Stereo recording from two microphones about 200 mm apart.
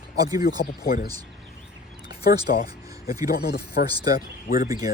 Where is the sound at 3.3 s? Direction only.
50° left (ahead or behind).